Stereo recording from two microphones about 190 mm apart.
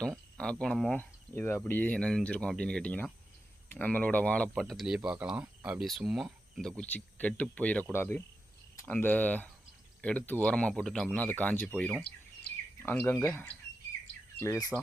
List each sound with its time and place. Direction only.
0.0 s speech: 5° left (ahead or behind)
12.8 s speech: 10° left (ahead or behind)